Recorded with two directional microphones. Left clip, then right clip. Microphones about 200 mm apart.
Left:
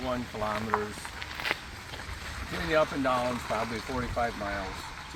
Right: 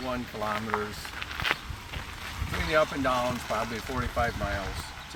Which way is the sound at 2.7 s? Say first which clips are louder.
Right 1 dB; 10° right (ahead or behind).